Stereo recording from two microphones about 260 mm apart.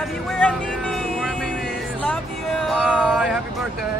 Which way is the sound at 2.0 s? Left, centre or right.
Centre.